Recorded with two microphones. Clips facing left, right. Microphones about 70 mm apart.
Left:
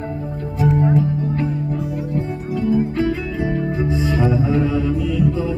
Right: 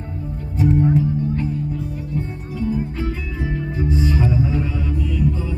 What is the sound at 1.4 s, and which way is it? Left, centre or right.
Music, left.